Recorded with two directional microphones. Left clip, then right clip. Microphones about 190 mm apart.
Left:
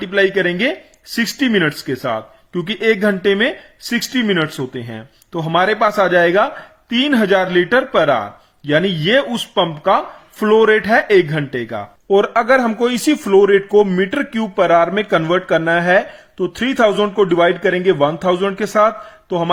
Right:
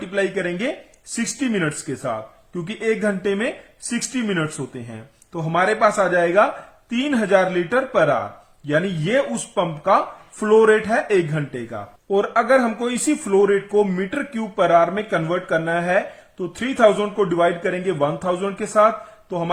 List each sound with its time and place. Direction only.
0.0 s speech: 25° left (ahead or behind)